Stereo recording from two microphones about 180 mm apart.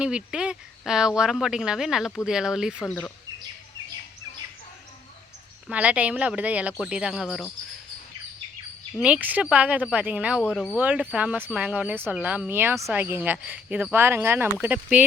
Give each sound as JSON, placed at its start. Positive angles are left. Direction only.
{"t": 0.0, "sound": "speech", "side_deg": -5}
{"t": 5.6, "sound": "speech", "side_deg": -5}
{"t": 9.0, "sound": "speech", "side_deg": -5}